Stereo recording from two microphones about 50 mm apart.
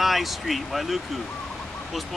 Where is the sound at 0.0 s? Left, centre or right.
Centre.